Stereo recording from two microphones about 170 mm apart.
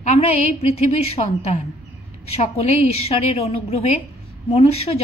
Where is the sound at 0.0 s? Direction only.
40° left (ahead or behind).